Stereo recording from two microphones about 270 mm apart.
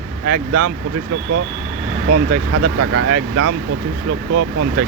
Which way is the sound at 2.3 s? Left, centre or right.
Right.